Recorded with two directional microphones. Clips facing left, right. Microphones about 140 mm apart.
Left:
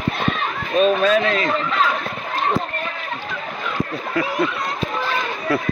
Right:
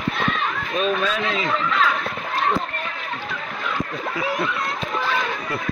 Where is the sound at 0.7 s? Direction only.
50° left (ahead or behind).